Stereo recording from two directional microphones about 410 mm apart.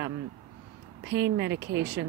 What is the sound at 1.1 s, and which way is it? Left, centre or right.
Speech, right.